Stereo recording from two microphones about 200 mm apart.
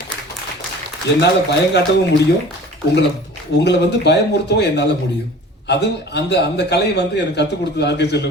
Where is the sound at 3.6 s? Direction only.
60° left (ahead or behind).